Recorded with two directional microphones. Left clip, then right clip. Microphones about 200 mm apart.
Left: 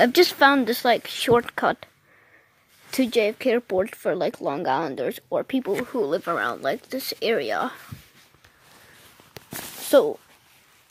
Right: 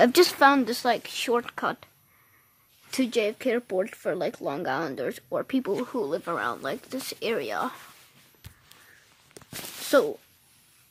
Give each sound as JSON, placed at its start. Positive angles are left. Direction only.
{"t": 0.0, "sound": "speech", "side_deg": 0}
{"t": 2.9, "sound": "speech", "side_deg": 20}
{"t": 5.9, "sound": "speech", "side_deg": 15}
{"t": 9.8, "sound": "speech", "side_deg": 15}